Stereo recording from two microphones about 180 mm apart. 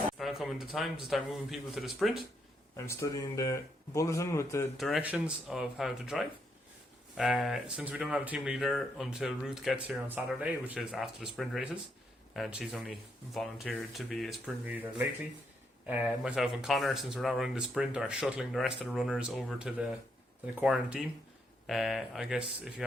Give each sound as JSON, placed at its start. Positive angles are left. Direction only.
{"t": 0.2, "sound": "speech", "side_deg": 0}
{"t": 2.7, "sound": "speech", "side_deg": 15}
{"t": 4.8, "sound": "speech", "side_deg": 0}